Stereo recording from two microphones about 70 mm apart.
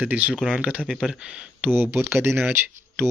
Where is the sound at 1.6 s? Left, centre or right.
Right.